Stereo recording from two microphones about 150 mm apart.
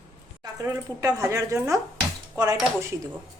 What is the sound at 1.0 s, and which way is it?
A woman's voice, 20° right (ahead or behind).